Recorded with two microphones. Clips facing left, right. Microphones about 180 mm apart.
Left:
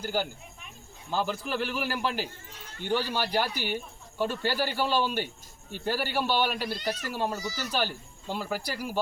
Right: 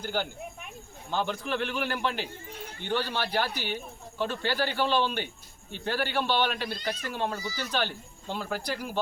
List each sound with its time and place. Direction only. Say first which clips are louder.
0.0 s a man's voice: left 1 dB; 5° left (ahead or behind)
2.5 s a sound: right 7 dB; 60° right (ahead or behind)
2.8 s speech: left 2 dB; 10° left (ahead or behind)